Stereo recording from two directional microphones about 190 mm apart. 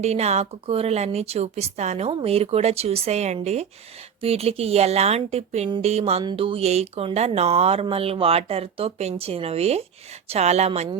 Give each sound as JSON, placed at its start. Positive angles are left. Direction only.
{"t": 0.0, "sound": "speech", "side_deg": -35}